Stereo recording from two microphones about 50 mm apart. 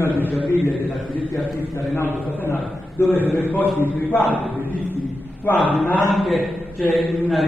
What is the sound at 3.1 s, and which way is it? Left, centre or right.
Speech, left.